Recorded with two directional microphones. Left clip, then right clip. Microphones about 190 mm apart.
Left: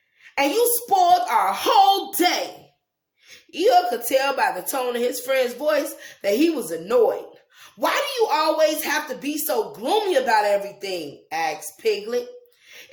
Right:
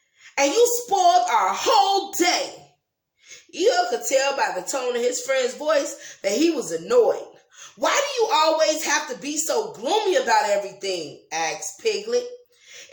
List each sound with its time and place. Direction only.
0.9 s speech: 25° left (ahead or behind)